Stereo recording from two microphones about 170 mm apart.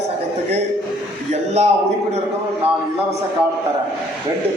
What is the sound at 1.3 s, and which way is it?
Speech, 40° right (ahead or behind).